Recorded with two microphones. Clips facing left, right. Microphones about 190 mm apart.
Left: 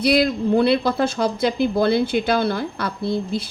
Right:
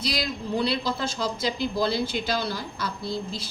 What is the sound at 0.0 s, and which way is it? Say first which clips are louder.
A man's voice: left 12 dB; 60° left (ahead or behind).